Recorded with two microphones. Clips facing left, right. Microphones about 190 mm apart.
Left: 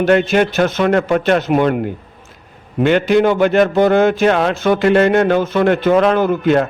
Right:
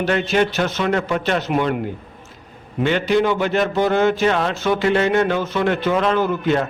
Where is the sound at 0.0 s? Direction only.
55° left (ahead or behind).